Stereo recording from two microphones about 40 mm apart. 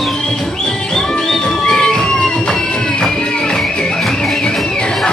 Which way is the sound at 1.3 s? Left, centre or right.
Centre.